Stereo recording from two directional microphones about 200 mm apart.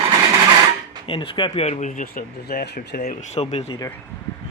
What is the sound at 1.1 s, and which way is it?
Speech, 25° left (ahead or behind).